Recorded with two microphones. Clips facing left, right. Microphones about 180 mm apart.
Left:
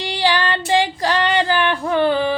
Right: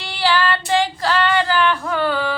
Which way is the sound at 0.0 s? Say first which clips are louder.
Even; 15° left (ahead or behind).